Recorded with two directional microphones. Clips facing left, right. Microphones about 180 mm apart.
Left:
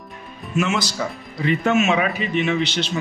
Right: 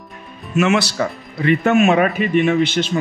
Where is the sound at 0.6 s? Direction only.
65° right (ahead or behind).